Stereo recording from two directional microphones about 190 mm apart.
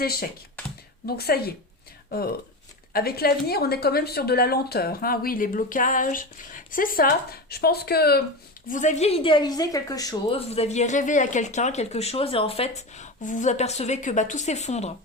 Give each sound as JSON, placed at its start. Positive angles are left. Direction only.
{"t": 0.0, "sound": "a woman's voice", "side_deg": 55}
{"t": 8.6, "sound": "a woman's voice", "side_deg": 40}